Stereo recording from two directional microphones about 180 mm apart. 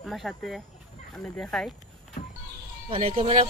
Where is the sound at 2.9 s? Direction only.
35° right (ahead or behind).